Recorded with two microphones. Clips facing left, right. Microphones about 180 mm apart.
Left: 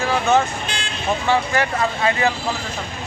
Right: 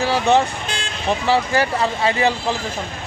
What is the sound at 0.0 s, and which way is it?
Vehicle, 30° right (ahead or behind).